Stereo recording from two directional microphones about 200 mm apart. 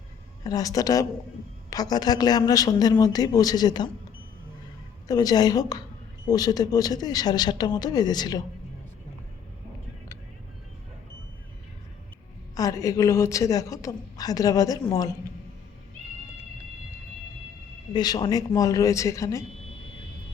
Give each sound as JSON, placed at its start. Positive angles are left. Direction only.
{"t": 0.4, "sound": "a woman's voice", "side_deg": 15}
{"t": 5.0, "sound": "speech", "side_deg": 20}
{"t": 12.5, "sound": "a woman's voice", "side_deg": 15}
{"t": 17.9, "sound": "a woman's voice", "side_deg": 20}